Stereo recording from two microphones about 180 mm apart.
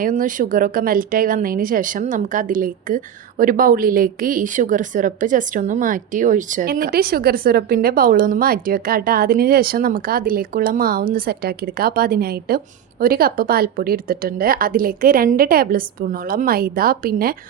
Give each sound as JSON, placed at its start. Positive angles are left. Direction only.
{"t": 0.0, "sound": "speech", "side_deg": -50}